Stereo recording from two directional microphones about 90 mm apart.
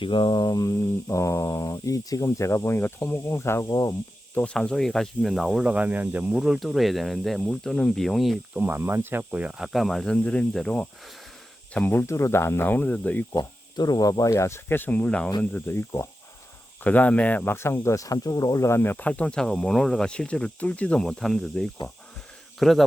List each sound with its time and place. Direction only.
0.0 s speech: 65° left (ahead or behind); by 3.7 s 30° left (ahead or behind)
3.7 s speech: 45° left (ahead or behind)
4.4 s speech: 10° left (ahead or behind); by 6.3 s 15° right (ahead or behind)
6.3 s speech: 5° right (ahead or behind)
8.6 s speech: 25° right (ahead or behind)
9.3 s speech: 10° right (ahead or behind); by 11.1 s 5° left (ahead or behind)
11.7 s speech: 20° left (ahead or behind)
13.3 s speech: 45° left (ahead or behind); by 15.3 s 10° left (ahead or behind)
15.5 s speech: 25° left (ahead or behind)
16.8 s speech: 15° left (ahead or behind)
17.8 s speech: 40° left (ahead or behind); by 22.8 s centre (ahead or behind)